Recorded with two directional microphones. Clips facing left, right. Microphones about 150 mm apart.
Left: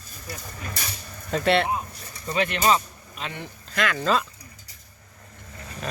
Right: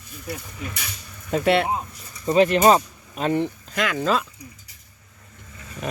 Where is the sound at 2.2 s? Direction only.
35° right (ahead or behind).